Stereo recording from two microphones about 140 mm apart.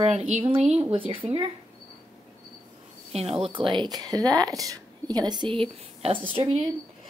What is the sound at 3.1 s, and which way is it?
A woman's voice, 45° right (ahead or behind).